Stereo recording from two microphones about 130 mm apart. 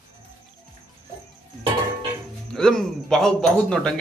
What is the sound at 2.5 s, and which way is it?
A man's voice, 5° left (ahead or behind).